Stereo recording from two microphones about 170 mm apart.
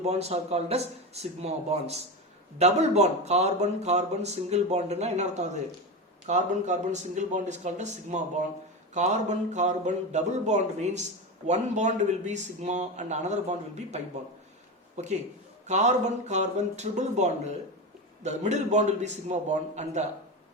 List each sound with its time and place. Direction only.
0.0 s a man's voice: 40° right (ahead or behind)